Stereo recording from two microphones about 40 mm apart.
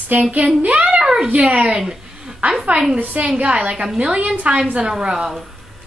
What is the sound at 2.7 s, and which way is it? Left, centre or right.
A woman's voice, right.